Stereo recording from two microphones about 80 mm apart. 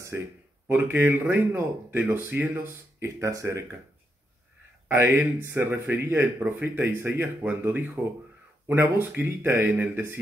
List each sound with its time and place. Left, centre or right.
0.7 s speech: right
4.8 s speech: right